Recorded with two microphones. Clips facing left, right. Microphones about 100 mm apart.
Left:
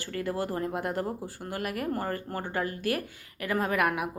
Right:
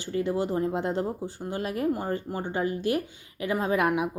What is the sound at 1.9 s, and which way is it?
Speech, 15° right (ahead or behind).